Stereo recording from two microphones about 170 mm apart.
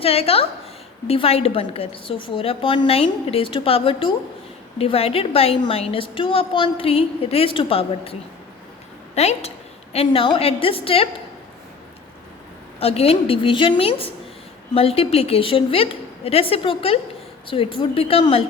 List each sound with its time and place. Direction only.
0.0 s a woman's voice: 35° left (ahead or behind)
9.1 s a woman's voice: 40° left (ahead or behind)
12.8 s a woman's voice: 35° left (ahead or behind)